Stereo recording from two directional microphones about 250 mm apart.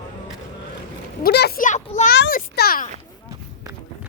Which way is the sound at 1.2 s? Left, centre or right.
Left.